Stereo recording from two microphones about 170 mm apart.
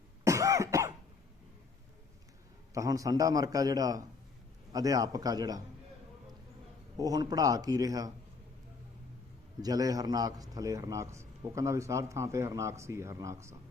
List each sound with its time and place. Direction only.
0.3 s cough: 20° right (ahead or behind)
2.7 s a man's voice: 20° right (ahead or behind)
6.9 s a man's voice: 20° right (ahead or behind)
9.6 s a man's voice: 20° right (ahead or behind)